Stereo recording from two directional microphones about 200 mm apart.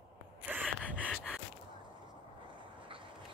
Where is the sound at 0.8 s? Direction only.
5° right (ahead or behind).